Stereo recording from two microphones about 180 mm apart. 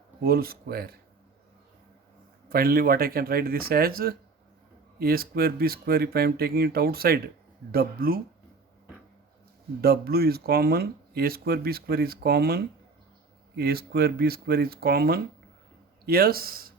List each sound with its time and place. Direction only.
0.2 s speech: 55° right (ahead or behind)
2.5 s speech: 55° right (ahead or behind)
9.8 s speech: 60° right (ahead or behind)